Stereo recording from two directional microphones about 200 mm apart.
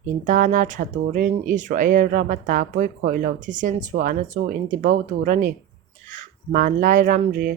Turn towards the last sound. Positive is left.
turn(degrees=-40)  # may be behind; listen again after turning